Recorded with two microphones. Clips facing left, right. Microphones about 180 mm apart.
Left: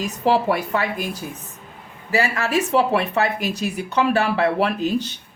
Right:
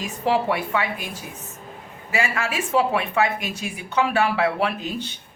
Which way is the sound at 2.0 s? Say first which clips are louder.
Left 3 dB; 35° left (ahead or behind).